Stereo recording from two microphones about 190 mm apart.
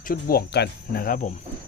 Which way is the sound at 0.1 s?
55° left (ahead or behind).